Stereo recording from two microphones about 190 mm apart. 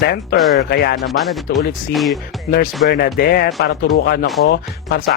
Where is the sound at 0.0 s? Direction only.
55° left (ahead or behind).